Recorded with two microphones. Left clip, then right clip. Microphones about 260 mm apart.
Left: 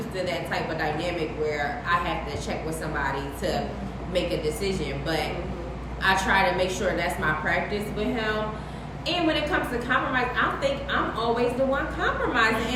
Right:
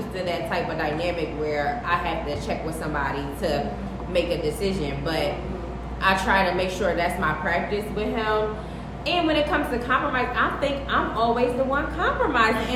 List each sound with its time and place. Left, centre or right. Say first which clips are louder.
0.3 s a woman's voice: right 4 dB; right
4.1 s a woman's voice: right 2 dB; right